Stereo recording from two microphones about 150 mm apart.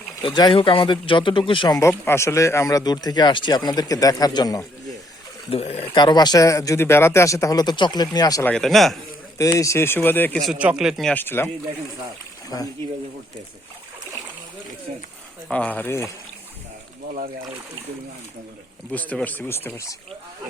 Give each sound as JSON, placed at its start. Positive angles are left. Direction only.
{"t": 0.2, "sound": "speech", "side_deg": 30}
{"t": 5.5, "sound": "speech", "side_deg": 40}
{"t": 6.0, "sound": "speech", "side_deg": 30}
{"t": 8.4, "sound": "a man's voice", "side_deg": 5}
{"t": 9.4, "sound": "speech", "side_deg": 20}
{"t": 10.4, "sound": "a man's voice", "side_deg": -5}
{"t": 11.1, "sound": "speech", "side_deg": 15}
{"t": 14.9, "sound": "speech", "side_deg": -55}
{"t": 15.4, "sound": "speech", "side_deg": 10}
{"t": 18.9, "sound": "speech", "side_deg": 10}